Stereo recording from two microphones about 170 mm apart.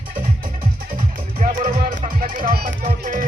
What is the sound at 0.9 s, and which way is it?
Music, 55° right (ahead or behind).